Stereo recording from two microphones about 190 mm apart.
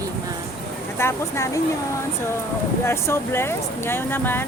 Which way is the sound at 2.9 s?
15° left (ahead or behind).